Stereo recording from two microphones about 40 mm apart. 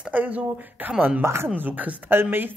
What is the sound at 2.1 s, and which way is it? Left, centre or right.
Speech, right.